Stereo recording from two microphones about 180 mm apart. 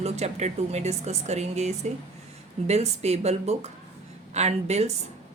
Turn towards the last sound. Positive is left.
turn(degrees=-35)  # may be behind; listen again after turning